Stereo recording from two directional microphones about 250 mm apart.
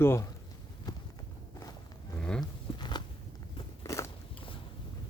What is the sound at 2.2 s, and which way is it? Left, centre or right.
Livestock, centre.